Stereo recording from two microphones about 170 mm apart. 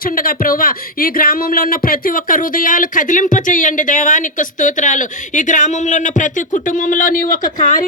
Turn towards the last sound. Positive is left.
turn(degrees=50)  # may be behind; listen again after turning